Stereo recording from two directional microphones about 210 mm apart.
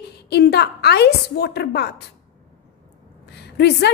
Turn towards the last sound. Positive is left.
turn(degrees=50)  # may be behind; listen again after turning